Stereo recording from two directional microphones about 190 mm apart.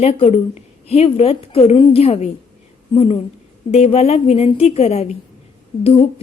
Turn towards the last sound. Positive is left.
turn(degrees=30)  # may be behind; listen again after turning